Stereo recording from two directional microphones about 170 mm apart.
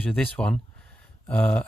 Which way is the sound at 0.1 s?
5° left (ahead or behind).